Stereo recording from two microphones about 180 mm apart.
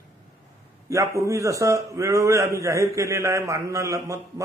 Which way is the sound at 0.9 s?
15° right (ahead or behind).